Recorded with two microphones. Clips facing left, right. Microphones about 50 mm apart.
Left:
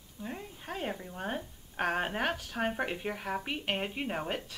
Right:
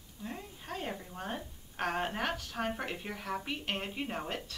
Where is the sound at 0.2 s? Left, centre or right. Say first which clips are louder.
Left 2 dB; centre.